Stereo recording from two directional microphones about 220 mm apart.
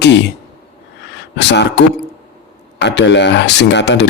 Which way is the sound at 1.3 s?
50° left (ahead or behind).